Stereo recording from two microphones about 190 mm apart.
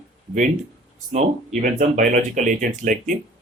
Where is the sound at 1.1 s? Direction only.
40° right (ahead or behind).